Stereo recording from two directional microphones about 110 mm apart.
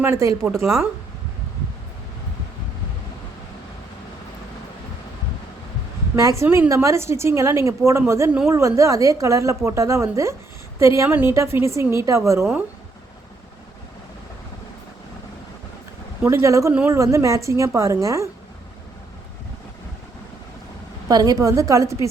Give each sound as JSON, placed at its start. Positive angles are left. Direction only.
{"t": 0.0, "sound": "a woman's voice", "side_deg": -25}
{"t": 6.1, "sound": "a woman's voice", "side_deg": -30}
{"t": 16.2, "sound": "a woman's voice", "side_deg": -25}
{"t": 21.1, "sound": "a woman's voice", "side_deg": -35}